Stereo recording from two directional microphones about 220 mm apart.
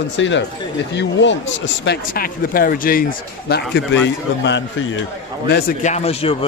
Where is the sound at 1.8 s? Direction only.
40° left (ahead or behind).